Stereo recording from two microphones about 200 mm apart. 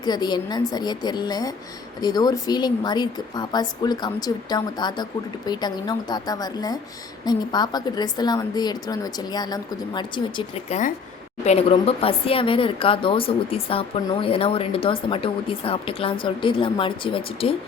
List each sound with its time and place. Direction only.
0.0 s a woman's voice: 20° left (ahead or behind)